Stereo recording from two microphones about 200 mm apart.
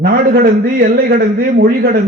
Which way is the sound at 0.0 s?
50° right (ahead or behind).